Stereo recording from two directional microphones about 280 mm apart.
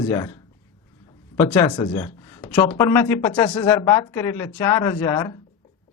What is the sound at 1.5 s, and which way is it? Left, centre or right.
Speech, centre.